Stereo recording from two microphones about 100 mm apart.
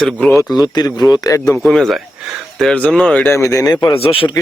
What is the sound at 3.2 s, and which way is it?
Speech, 30° left (ahead or behind).